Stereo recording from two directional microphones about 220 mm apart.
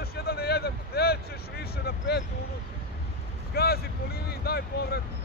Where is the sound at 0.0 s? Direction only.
45° left (ahead or behind).